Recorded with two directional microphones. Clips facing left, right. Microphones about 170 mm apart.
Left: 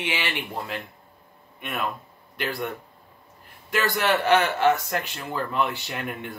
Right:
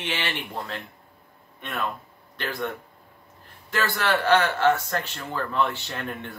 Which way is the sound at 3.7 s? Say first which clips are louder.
Left 2 dB; 15° left (ahead or behind).